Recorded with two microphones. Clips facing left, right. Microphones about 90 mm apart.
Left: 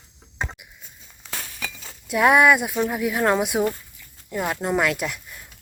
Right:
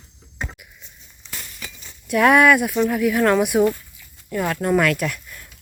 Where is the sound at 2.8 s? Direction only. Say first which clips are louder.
Right 4 dB; 20° left (ahead or behind).